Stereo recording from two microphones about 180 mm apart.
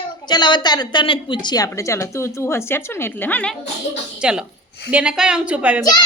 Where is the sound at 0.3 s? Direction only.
25° left (ahead or behind); by 3.6 s 5° left (ahead or behind).